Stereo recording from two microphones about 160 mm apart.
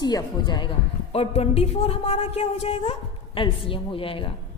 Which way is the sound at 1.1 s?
40° left (ahead or behind).